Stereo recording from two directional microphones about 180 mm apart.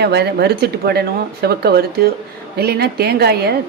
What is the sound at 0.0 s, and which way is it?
Speech, 65° right (ahead or behind).